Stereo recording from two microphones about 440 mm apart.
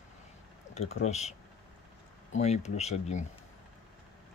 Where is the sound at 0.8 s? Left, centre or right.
Centre.